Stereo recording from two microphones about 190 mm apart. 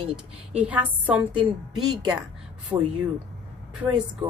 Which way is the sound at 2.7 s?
15° right (ahead or behind).